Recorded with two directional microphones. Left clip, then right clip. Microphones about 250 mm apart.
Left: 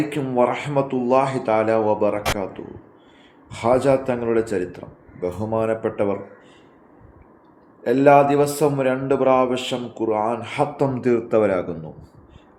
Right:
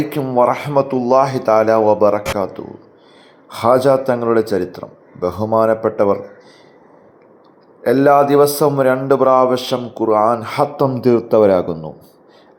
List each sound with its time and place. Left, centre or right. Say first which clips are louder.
0.1 s speech: right 8 dB; centre
7.9 s speech: right 3 dB; centre
10.8 s speech: right 7 dB; centre